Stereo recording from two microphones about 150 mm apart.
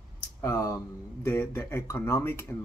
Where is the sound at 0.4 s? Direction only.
20° left (ahead or behind).